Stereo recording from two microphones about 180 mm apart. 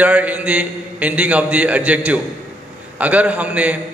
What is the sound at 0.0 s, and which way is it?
A man's voice, 10° right (ahead or behind).